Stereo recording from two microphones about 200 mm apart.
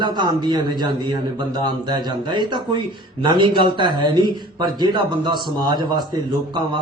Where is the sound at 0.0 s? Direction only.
20° right (ahead or behind).